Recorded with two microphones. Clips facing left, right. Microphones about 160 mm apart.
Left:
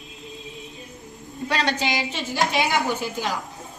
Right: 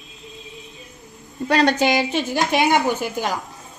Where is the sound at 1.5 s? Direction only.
50° right (ahead or behind).